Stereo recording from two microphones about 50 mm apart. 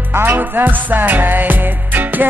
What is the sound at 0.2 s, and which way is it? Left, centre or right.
Music, right.